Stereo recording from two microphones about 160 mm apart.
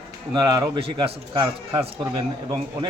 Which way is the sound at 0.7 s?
35° right (ahead or behind).